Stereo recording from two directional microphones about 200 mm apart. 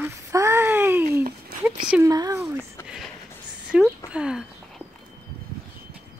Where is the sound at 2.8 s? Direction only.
15° left (ahead or behind).